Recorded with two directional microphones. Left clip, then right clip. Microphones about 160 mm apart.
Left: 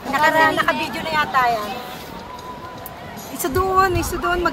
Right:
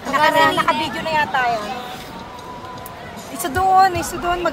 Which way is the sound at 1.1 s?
50° left (ahead or behind).